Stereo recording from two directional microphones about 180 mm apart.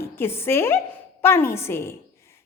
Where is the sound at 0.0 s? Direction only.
15° left (ahead or behind).